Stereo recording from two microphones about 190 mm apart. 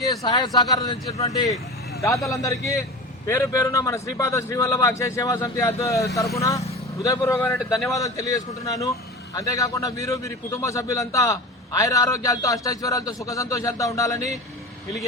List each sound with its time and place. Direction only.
0.2 s a man's voice: 25° left (ahead or behind)